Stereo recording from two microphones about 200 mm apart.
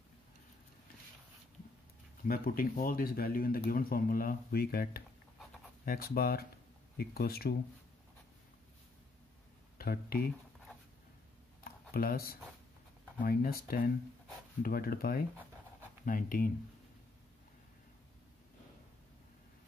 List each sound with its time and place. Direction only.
2.2 s speech: 45° left (ahead or behind)
9.8 s speech: 50° left (ahead or behind)
11.6 s a sound: 45° left (ahead or behind)
13.2 s speech: 45° left (ahead or behind)